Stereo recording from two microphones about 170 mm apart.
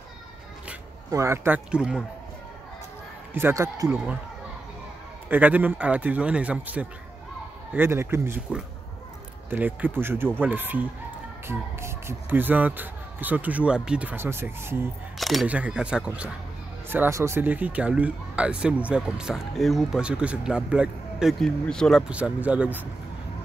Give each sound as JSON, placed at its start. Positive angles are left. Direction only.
{"t": 1.1, "sound": "speech", "side_deg": -15}
{"t": 3.3, "sound": "speech", "side_deg": -15}
{"t": 3.9, "sound": "speech", "side_deg": -5}
{"t": 5.3, "sound": "speech", "side_deg": -10}
{"t": 15.1, "sound": "speech", "side_deg": 0}